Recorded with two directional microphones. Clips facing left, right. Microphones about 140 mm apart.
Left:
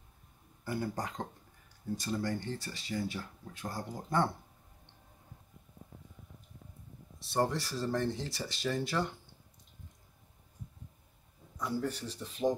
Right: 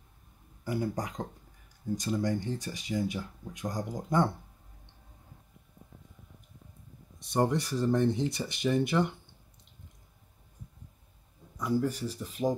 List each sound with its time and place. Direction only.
0.7 s speech: 15° right (ahead or behind)
7.2 s speech: 15° right (ahead or behind)
11.6 s speech: 10° right (ahead or behind)